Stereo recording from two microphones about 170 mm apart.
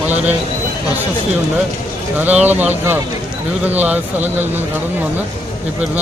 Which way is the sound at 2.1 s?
10° right (ahead or behind).